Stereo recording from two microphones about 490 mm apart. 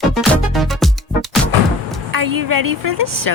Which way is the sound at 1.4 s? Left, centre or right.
Centre.